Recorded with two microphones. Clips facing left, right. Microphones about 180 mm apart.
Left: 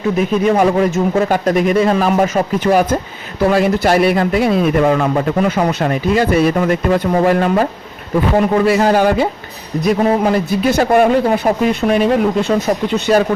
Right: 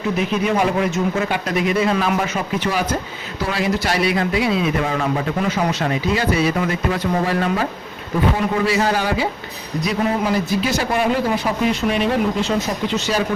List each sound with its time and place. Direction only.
0.2 s speech: 45° left (ahead or behind)